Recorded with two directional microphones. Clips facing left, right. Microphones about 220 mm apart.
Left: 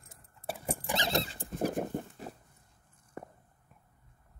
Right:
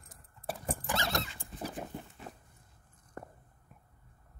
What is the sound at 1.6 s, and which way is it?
Dog, 50° left (ahead or behind).